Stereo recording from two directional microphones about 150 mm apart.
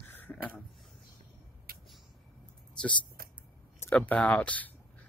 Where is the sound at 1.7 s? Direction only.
75° right (ahead or behind).